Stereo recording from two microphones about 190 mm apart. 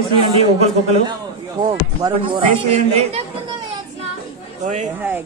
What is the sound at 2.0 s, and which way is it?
A man's voice, 25° right (ahead or behind).